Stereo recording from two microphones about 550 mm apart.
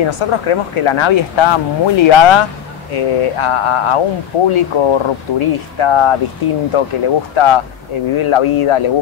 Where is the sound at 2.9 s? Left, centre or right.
Left.